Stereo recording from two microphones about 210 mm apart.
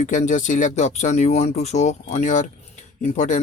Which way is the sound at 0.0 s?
35° left (ahead or behind).